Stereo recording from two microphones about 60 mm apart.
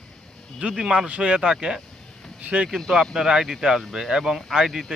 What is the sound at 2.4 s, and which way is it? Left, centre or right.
Speech, right.